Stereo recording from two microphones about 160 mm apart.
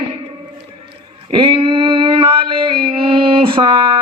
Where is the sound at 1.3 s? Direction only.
30° right (ahead or behind).